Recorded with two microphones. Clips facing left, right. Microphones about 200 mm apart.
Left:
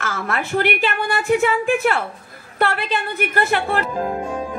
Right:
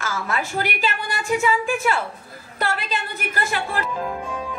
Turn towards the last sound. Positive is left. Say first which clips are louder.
# left 4 dB
turn(degrees=40)  # may be behind; listen again after turning